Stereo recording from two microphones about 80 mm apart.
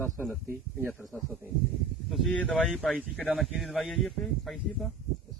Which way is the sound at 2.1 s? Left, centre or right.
Centre.